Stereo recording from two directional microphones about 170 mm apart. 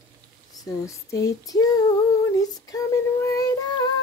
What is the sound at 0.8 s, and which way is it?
Female singing, 20° left (ahead or behind).